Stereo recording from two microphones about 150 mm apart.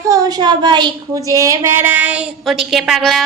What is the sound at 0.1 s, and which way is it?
A woman's voice, 25° right (ahead or behind).